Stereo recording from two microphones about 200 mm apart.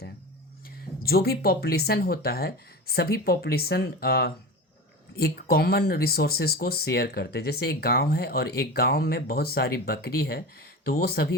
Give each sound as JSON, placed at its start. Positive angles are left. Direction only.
{"t": 1.0, "sound": "speech", "side_deg": 50}